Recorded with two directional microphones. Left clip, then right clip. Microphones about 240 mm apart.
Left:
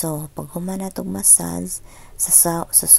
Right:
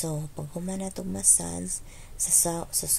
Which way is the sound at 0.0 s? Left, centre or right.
Left.